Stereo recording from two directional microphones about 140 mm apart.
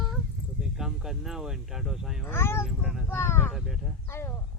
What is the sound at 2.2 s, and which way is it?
Speech, 15° left (ahead or behind).